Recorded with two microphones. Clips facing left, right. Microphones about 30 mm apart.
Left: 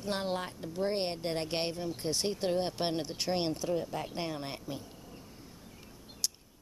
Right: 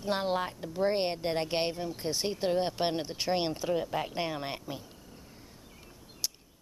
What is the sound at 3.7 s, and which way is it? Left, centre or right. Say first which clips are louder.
Speech: right 3 dB; right.